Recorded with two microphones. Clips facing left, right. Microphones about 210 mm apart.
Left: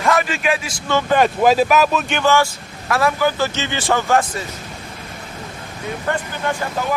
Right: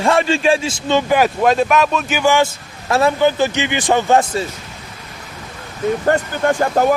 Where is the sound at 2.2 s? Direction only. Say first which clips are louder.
Right 2 dB; 15° right (ahead or behind).